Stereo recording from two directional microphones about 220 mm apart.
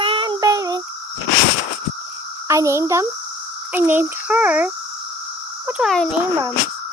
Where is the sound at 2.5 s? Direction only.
15° right (ahead or behind).